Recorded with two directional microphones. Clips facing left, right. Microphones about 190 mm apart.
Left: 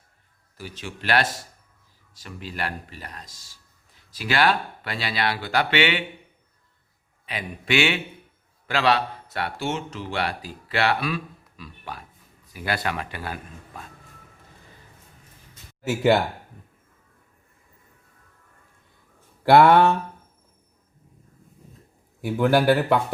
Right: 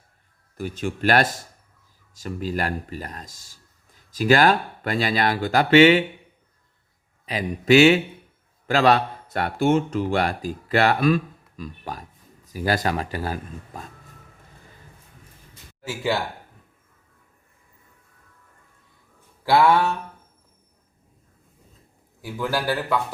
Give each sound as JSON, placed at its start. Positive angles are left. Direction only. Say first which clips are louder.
{"t": 0.5, "sound": "speech", "louder": "right 9 dB", "side_deg": -50}
{"t": 7.3, "sound": "a man's voice", "louder": "right 9 dB", "side_deg": -40}
{"t": 19.5, "sound": "speech", "louder": "left 3 dB", "side_deg": 55}
{"t": 22.2, "sound": "speech", "louder": "left 7 dB", "side_deg": 60}